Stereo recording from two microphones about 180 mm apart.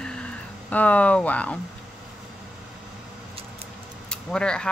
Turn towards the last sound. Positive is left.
turn(degrees=5)  # may be behind; listen again after turning